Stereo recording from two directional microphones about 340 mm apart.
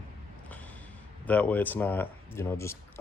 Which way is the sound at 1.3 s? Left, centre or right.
Centre.